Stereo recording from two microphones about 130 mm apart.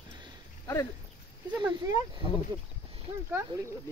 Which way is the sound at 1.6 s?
35° right (ahead or behind).